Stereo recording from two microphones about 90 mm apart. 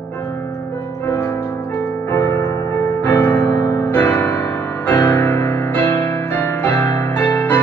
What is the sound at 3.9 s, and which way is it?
Music, 20° left (ahead or behind).